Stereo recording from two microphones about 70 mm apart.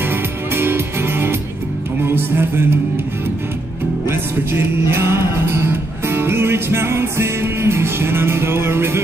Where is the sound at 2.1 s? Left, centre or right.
Right.